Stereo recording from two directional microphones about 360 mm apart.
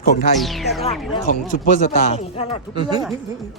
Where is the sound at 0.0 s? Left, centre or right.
Centre.